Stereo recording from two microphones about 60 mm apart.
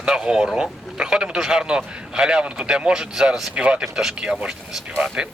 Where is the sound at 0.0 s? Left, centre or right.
Centre.